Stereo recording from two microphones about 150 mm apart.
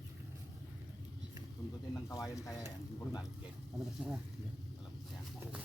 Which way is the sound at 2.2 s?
20° left (ahead or behind).